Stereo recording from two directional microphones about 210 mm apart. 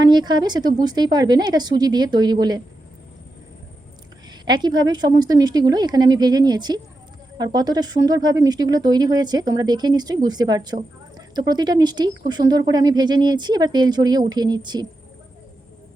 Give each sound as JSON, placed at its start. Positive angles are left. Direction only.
{"t": 0.0, "sound": "speech", "side_deg": -20}
{"t": 4.3, "sound": "speech", "side_deg": -20}